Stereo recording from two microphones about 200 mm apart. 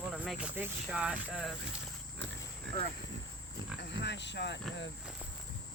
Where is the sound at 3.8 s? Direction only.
60° left (ahead or behind).